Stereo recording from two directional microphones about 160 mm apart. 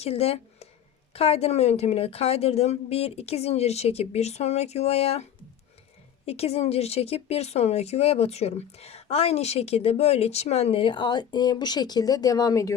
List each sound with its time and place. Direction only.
0.0 s a woman's voice: 40° left (ahead or behind); by 12.7 s 20° left (ahead or behind)